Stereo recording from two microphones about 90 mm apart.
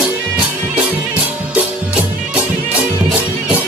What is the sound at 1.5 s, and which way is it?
Music, 15° right (ahead or behind).